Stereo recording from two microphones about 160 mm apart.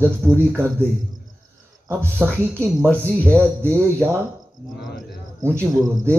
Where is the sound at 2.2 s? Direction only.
10° right (ahead or behind).